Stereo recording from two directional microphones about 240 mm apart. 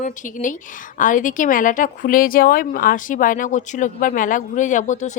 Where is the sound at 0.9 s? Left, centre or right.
Left.